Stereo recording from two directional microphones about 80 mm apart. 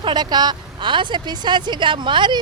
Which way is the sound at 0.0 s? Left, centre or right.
Right.